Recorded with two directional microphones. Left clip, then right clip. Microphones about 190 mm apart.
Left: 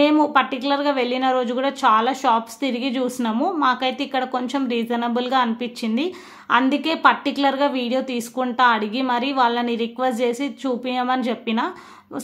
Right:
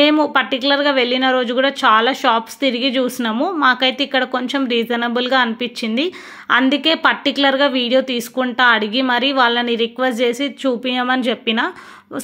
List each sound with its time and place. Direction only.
0.0 s speech: 20° right (ahead or behind)